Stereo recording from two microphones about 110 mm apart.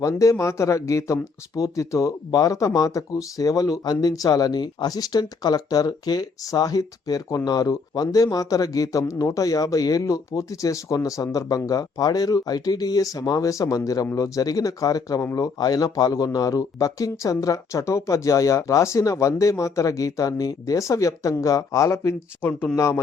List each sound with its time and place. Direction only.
0.0 s a man's voice: 30° left (ahead or behind)